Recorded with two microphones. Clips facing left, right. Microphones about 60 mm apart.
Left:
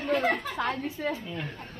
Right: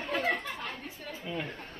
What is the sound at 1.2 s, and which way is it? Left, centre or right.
Speech, centre.